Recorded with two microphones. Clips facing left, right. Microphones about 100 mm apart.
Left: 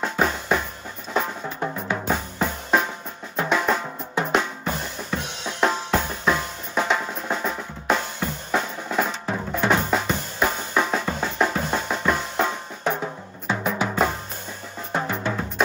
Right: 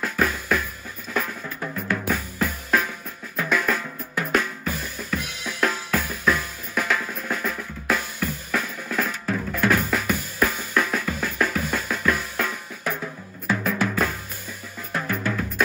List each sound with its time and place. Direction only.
0.0 s music: 25° left (ahead or behind)
1.1 s drum: 30° left (ahead or behind)
1.9 s music: 25° left (ahead or behind)
3.3 s drum: 25° left (ahead or behind)
5.6 s music: 25° left (ahead or behind)